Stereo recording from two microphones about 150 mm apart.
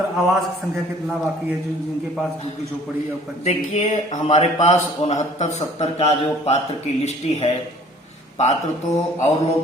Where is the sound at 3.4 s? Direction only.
50° left (ahead or behind).